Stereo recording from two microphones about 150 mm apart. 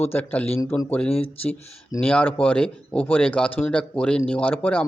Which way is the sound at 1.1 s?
40° left (ahead or behind).